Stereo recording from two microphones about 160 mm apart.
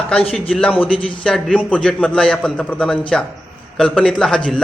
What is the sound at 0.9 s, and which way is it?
Speech, 35° left (ahead or behind).